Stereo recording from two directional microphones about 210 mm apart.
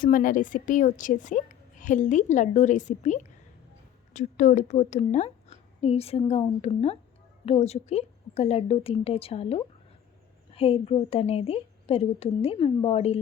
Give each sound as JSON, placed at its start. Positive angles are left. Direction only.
{"t": 0.0, "sound": "a woman's voice", "side_deg": 40}